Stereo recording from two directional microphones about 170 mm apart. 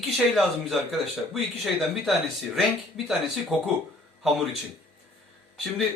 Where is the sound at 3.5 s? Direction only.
Centre (ahead or behind).